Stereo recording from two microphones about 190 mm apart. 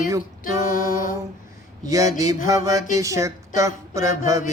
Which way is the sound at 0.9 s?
45° left (ahead or behind).